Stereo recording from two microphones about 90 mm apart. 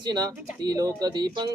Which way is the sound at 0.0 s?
50° right (ahead or behind).